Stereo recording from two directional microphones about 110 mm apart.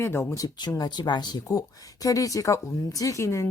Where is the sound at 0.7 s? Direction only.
40° left (ahead or behind).